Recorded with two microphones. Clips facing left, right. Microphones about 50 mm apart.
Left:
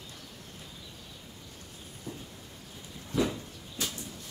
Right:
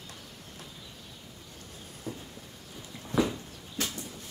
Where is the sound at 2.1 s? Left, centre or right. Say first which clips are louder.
Right 3 dB; right.